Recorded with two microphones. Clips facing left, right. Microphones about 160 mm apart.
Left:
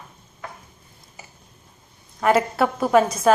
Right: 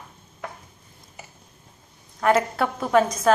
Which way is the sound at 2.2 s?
5° left (ahead or behind).